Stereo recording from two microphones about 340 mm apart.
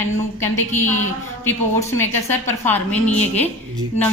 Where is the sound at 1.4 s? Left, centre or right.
Centre.